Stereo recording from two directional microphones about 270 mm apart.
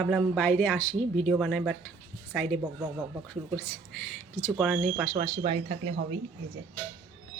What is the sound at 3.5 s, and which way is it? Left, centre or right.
A woman's voice, centre.